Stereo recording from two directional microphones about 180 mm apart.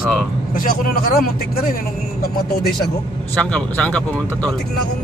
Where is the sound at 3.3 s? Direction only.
5° left (ahead or behind).